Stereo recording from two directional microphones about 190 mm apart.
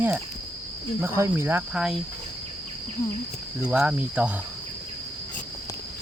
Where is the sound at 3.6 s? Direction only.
5° right (ahead or behind).